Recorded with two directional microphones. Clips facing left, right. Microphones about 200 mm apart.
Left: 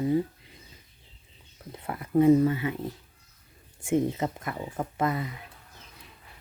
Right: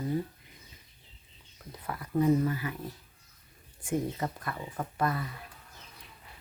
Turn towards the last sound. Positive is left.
turn(degrees=20)  # may be behind; listen again after turning